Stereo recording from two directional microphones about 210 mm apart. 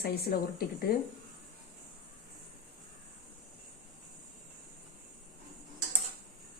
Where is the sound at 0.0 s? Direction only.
45° left (ahead or behind).